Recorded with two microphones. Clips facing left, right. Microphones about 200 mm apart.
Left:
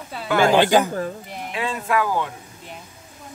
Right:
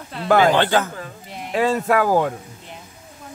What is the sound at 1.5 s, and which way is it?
Speech, 40° right (ahead or behind).